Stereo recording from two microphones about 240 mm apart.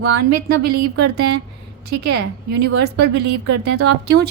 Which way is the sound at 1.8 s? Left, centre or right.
Right.